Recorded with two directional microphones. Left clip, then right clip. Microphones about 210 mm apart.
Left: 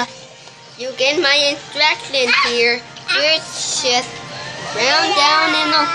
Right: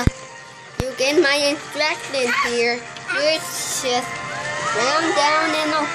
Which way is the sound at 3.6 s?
75° right (ahead or behind).